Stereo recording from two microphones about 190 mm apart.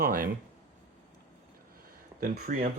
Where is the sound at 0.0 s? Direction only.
50° right (ahead or behind).